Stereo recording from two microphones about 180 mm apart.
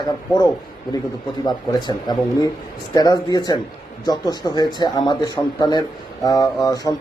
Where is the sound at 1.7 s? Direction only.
20° left (ahead or behind).